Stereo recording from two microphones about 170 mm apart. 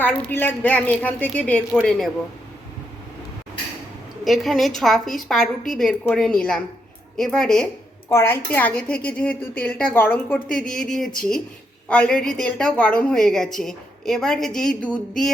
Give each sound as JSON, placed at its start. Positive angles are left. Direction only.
{"t": 0.0, "sound": "a woman's voice", "side_deg": 10}
{"t": 4.2, "sound": "a woman's voice", "side_deg": 0}